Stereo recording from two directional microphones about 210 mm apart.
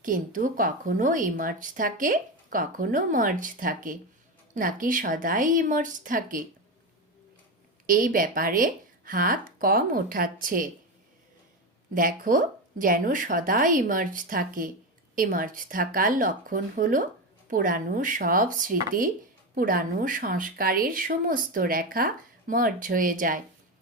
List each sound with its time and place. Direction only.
0.0 s speech: 40° right (ahead or behind)
7.9 s speech: 40° right (ahead or behind)
11.9 s speech: 40° right (ahead or behind)